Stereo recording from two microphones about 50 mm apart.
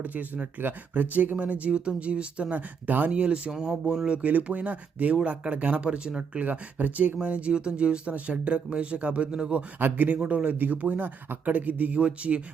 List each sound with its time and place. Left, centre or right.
0.0 s speech: right
3.5 s speech: centre
4.2 s speech: right
9.8 s speech: right